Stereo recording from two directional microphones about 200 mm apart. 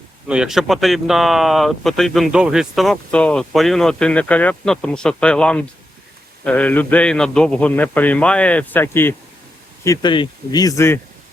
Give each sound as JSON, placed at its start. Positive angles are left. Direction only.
{"t": 0.3, "sound": "a man's voice", "side_deg": -5}